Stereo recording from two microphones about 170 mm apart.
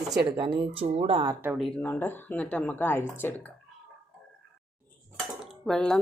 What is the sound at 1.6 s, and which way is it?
Dishes, 10° left (ahead or behind).